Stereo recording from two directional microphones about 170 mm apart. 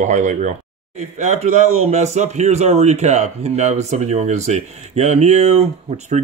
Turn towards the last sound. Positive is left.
turn(degrees=-40)  # may be behind; listen again after turning